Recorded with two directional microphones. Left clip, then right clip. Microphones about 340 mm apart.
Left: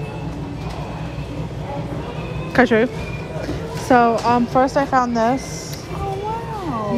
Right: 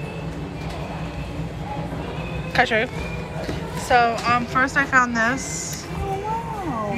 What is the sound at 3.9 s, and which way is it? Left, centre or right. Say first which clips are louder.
A woman's voice: left 3 dB; centre.